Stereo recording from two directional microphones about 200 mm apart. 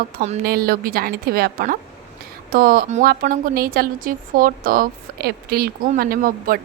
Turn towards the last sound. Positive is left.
turn(degrees=-45)  # may be behind; listen again after turning